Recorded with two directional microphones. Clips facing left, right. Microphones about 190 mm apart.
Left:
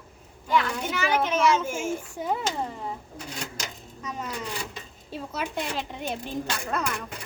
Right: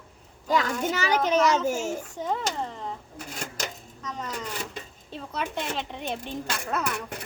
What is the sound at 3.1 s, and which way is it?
Speech, 45° right (ahead or behind).